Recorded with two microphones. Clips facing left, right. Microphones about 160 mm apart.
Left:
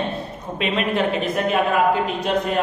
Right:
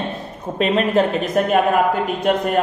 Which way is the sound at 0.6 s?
40° right (ahead or behind).